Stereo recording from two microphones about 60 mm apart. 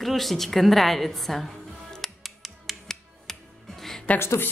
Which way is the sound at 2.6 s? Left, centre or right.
Centre.